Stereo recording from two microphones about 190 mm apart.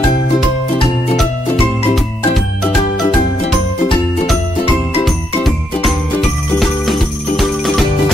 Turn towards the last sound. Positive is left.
turn(degrees=0)  # may be behind; listen again after turning